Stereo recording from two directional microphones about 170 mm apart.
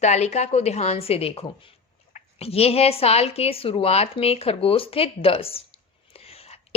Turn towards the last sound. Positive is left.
turn(degrees=35)  # may be behind; listen again after turning